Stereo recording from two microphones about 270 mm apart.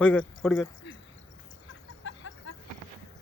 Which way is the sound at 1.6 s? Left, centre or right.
Left.